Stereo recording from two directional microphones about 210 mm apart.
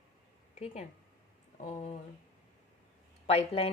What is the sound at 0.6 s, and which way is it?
A woman's voice, 30° left (ahead or behind).